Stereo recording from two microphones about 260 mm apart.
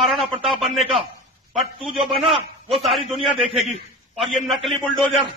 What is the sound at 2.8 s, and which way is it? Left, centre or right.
Speech, centre.